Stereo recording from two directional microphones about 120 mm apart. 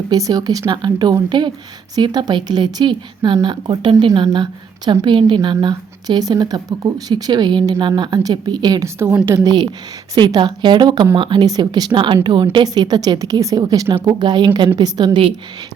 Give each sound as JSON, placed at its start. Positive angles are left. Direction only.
{"t": 0.1, "sound": "speech", "side_deg": -30}
{"t": 9.0, "sound": "a woman's voice", "side_deg": -20}